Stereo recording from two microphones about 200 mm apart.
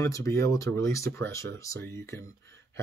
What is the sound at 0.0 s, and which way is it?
Speech, 15° left (ahead or behind).